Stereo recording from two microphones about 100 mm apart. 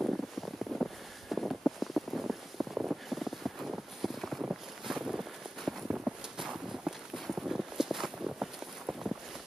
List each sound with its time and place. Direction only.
0.0 s wind noise: 10° right (ahead or behind)
1.3 s a sound: centre (ahead or behind)
3.7 s clip-clop: centre (ahead or behind)
4.5 s boat: 5° right (ahead or behind)
5.9 s walk: 5° right (ahead or behind)